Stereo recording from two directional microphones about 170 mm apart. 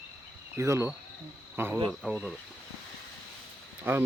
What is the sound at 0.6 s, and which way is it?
Speech, 15° right (ahead or behind).